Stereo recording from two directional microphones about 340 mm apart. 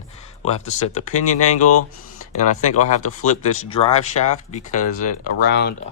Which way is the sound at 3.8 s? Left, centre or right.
Centre.